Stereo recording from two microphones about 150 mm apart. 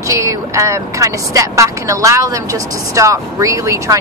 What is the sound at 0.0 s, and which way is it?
Speech, 20° right (ahead or behind).